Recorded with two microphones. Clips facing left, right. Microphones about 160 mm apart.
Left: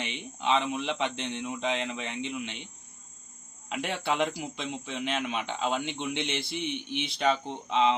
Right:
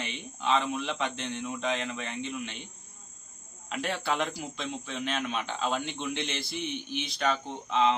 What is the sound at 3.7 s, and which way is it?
A man's voice, 20° left (ahead or behind).